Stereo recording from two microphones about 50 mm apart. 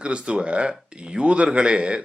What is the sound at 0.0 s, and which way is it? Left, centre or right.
Speech, right.